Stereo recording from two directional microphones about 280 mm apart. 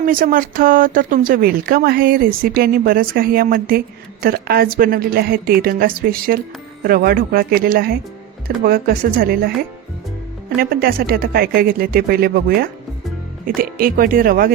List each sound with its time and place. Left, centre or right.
0.0 s speech: right
10.6 s speech: right
13.6 s speech: right